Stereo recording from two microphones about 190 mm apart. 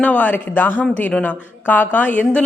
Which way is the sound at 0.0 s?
10° left (ahead or behind).